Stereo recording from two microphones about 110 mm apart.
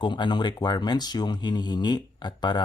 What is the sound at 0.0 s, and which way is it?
Speech, 45° left (ahead or behind).